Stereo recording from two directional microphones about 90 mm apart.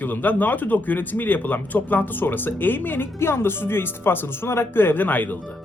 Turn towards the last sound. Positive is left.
turn(degrees=20)  # may be behind; listen again after turning